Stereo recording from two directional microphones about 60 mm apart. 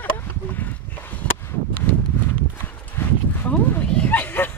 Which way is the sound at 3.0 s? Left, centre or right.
Left.